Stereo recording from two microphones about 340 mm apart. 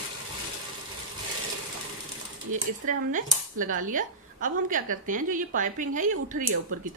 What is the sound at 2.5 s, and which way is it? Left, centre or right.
Speech, right.